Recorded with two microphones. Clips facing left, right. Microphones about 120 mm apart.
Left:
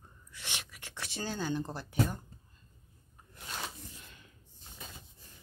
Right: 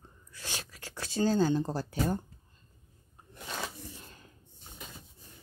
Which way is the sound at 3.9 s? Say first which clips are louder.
Right 4 dB; 35° right (ahead or behind).